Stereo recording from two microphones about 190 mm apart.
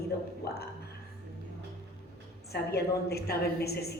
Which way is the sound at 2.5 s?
55° left (ahead or behind).